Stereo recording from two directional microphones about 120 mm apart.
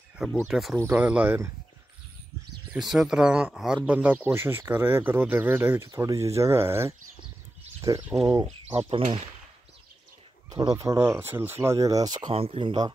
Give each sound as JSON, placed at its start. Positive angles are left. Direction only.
{"t": 0.5, "sound": "speech", "side_deg": 0}
{"t": 0.8, "sound": "speech", "side_deg": -15}
{"t": 2.7, "sound": "speech", "side_deg": -5}
{"t": 8.0, "sound": "speech", "side_deg": -10}
{"t": 8.7, "sound": "speech", "side_deg": -45}
{"t": 10.8, "sound": "speech", "side_deg": -25}
{"t": 12.4, "sound": "speech", "side_deg": -50}